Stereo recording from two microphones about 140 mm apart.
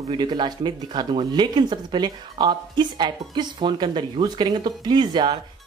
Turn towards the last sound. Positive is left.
turn(degrees=-30)  # may be behind; listen again after turning